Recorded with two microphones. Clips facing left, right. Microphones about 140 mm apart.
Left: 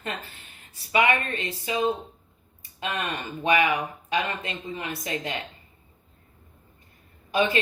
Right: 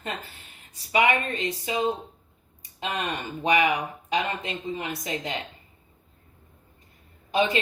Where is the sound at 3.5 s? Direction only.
25° right (ahead or behind).